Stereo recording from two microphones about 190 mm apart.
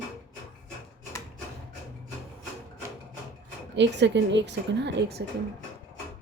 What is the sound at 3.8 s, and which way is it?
Speech, 70° right (ahead or behind).